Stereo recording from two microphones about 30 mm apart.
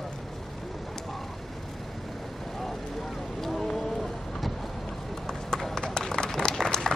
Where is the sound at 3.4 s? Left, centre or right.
Centre.